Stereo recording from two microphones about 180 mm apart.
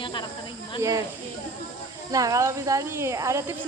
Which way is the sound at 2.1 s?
20° right (ahead or behind).